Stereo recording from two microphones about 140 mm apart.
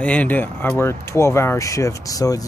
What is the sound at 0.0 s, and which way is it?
Speech, 10° left (ahead or behind).